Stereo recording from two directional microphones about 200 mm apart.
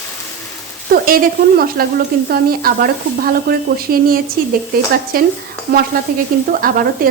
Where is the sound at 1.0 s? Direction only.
45° right (ahead or behind).